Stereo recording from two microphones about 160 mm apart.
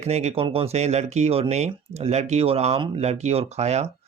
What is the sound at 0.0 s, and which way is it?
Speech, 45° right (ahead or behind).